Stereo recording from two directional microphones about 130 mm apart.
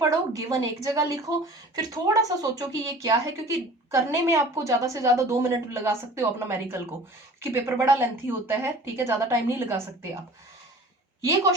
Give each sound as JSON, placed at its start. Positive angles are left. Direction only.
{"t": 0.0, "sound": "a woman's voice", "side_deg": -25}